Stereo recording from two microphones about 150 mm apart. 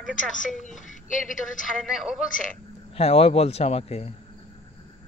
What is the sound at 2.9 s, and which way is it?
A man's voice, 40° left (ahead or behind).